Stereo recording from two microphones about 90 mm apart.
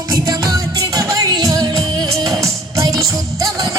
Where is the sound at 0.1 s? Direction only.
45° right (ahead or behind).